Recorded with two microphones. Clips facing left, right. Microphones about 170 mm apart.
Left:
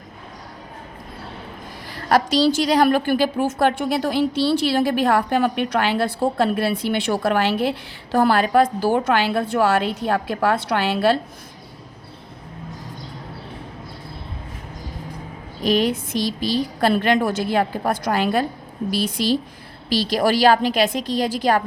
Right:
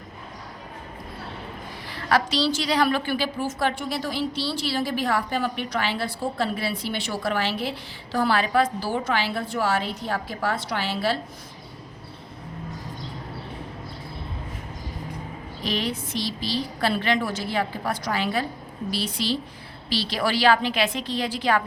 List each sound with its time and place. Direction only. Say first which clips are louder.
2.0 s a woman's voice: left 5 dB; 45° left (ahead or behind)
15.6 s a woman's voice: left 9 dB; 45° left (ahead or behind)